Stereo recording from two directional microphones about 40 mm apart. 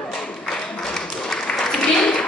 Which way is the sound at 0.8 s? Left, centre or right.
Centre.